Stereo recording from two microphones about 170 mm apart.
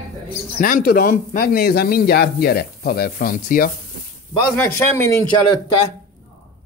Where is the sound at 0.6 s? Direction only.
55° left (ahead or behind).